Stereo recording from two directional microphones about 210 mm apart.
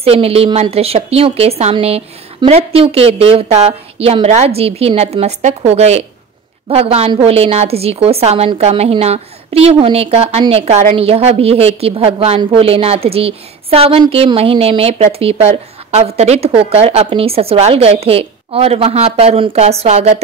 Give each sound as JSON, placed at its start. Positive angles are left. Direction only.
{"t": 0.0, "sound": "a woman's voice", "side_deg": -30}